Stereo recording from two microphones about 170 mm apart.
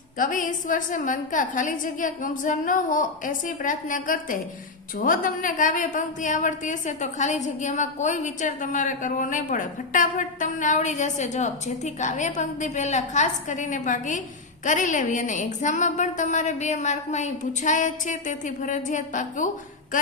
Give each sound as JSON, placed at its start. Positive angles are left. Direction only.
{"t": 0.2, "sound": "a woman's voice", "side_deg": 50}